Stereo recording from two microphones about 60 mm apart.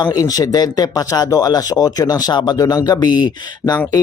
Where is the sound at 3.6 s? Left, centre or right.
Left.